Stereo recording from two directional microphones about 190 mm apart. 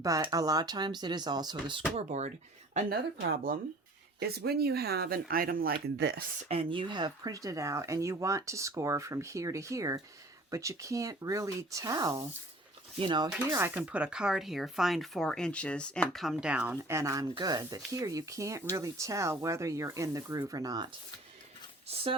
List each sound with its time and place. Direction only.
0.0 s speech: 20° right (ahead or behind)
2.0 s speech: 35° right (ahead or behind)
3.2 s speech: 55° right (ahead or behind)
6.5 s speech: 30° right (ahead or behind)
13.3 s speech: 10° right (ahead or behind)
21.9 s speech: 35° right (ahead or behind)